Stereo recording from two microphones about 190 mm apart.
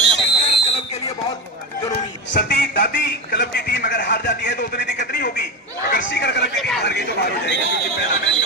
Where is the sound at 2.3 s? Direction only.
60° left (ahead or behind).